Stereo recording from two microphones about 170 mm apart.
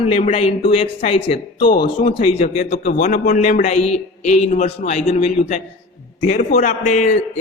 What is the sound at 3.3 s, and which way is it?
A man's voice, 45° left (ahead or behind).